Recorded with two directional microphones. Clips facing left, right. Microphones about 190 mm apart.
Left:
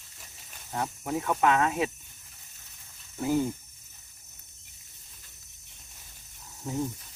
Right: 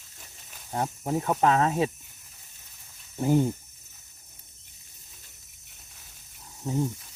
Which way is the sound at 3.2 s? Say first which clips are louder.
Right 3 dB; 30° right (ahead or behind).